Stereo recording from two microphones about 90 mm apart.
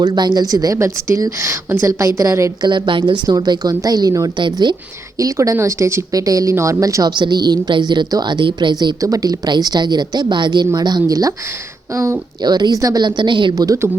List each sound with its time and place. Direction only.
0.0 s a woman's voice: 50° right (ahead or behind); by 2.5 s 35° right (ahead or behind)
2.6 s a woman's voice: 60° right (ahead or behind)
3.1 s a woman's voice: 50° right (ahead or behind)
7.2 s a woman's voice: 50° right (ahead or behind)
9.0 s a woman's voice: 40° right (ahead or behind)
12.4 s a woman's voice: 50° right (ahead or behind)
13.1 s a woman's voice: 60° right (ahead or behind)